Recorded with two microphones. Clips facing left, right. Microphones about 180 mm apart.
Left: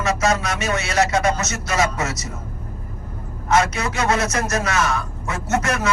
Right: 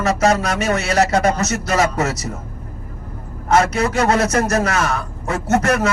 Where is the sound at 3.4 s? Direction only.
35° right (ahead or behind).